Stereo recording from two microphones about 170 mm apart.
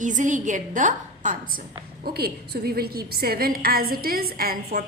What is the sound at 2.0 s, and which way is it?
A woman's voice, 65° right (ahead or behind).